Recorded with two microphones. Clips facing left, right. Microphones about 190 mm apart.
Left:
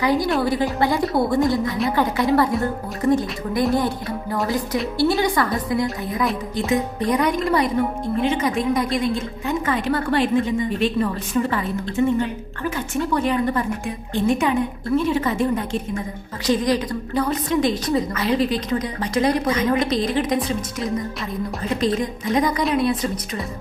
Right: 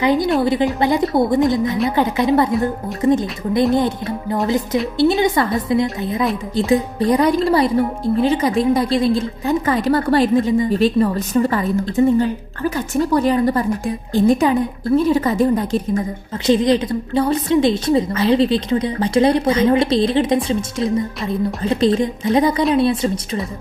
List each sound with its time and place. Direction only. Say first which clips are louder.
0.0 s a woman's voice: right 4 dB; 20° right (ahead or behind); by 15.8 s 35° right (ahead or behind)
16.5 s a woman's voice: right 5 dB; 25° right (ahead or behind)